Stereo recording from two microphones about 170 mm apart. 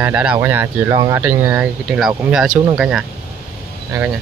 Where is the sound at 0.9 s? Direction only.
25° right (ahead or behind).